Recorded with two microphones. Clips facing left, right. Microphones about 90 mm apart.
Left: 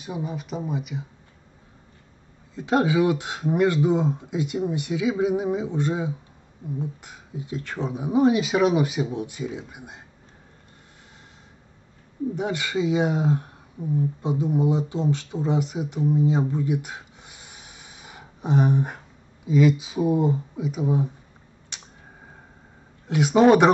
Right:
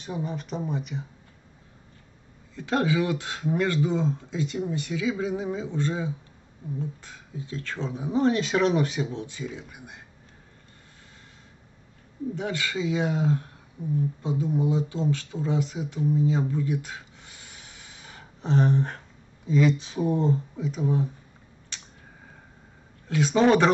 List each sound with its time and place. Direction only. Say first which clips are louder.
0.0 s speech: left 1 dB; 5° left (ahead or behind)
2.5 s speech: left 4 dB; 20° left (ahead or behind)
12.4 s speech: left 4 dB; 15° left (ahead or behind)
21.7 s tick-tock: left 1 dB; 20° left (ahead or behind)
23.0 s speech: left 4 dB; 20° left (ahead or behind)